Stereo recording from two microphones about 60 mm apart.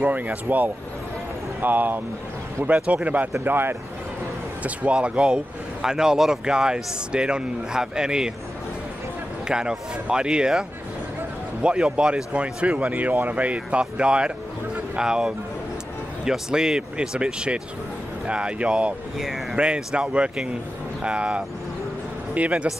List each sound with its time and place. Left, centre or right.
0.0 s speech: right
3.4 s speech: right
4.6 s speech: centre
9.5 s speech: centre
11.6 s speech: centre
19.1 s speech: centre
19.5 s a man's voice: centre